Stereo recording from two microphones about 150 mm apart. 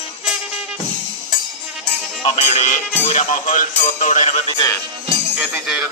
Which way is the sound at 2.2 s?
45° left (ahead or behind).